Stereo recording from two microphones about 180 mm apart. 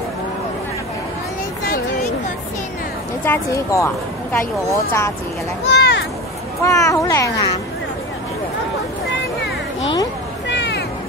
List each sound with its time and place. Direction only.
3.3 s speech: 15° left (ahead or behind)
5.7 s a sound: 70° left (ahead or behind)
6.6 s speech: 15° left (ahead or behind)
10.5 s vehicle: 70° left (ahead or behind)